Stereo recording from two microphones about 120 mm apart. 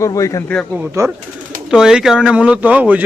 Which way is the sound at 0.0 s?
25° left (ahead or behind).